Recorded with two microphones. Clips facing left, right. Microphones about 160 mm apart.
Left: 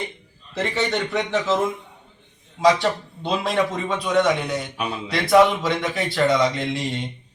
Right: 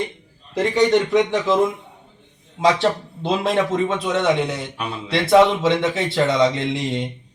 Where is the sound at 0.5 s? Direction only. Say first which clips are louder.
Right 7 dB; 15° right (ahead or behind).